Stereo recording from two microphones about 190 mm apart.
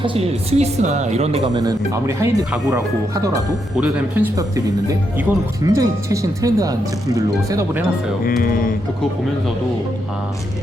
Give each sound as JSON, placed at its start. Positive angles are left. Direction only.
{"t": 0.0, "sound": "speech", "side_deg": -30}
{"t": 1.6, "sound": "speech", "side_deg": -15}
{"t": 8.4, "sound": "music", "side_deg": 45}